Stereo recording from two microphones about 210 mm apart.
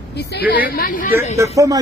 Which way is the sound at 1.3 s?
15° right (ahead or behind).